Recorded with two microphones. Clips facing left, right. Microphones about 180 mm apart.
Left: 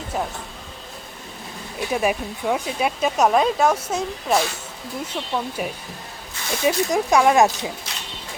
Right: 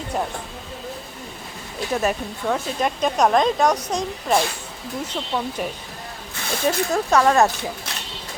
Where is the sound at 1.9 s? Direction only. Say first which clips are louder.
Left 1 dB; 10° left (ahead or behind).